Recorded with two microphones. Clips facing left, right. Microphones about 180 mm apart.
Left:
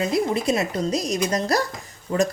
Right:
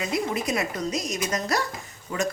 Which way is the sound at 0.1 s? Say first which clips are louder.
Left 5 dB; 30° left (ahead or behind).